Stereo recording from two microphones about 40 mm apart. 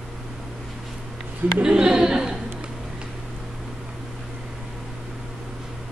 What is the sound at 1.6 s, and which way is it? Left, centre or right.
Speech, right.